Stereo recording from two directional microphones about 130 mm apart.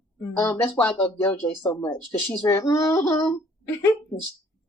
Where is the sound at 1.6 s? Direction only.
25° left (ahead or behind).